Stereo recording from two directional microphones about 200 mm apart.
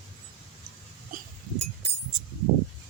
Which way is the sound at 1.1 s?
45° right (ahead or behind).